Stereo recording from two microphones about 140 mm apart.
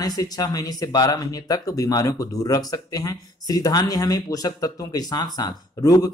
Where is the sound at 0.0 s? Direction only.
25° left (ahead or behind).